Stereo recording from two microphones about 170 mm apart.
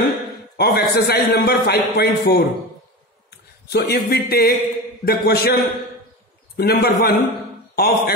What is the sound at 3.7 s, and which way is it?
A man's voice, 65° left (ahead or behind).